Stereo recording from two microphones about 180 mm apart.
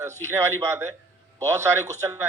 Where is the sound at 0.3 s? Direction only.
15° right (ahead or behind).